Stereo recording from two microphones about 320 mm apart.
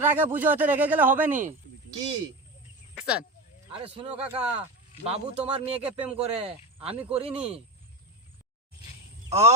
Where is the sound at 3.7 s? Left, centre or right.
Centre.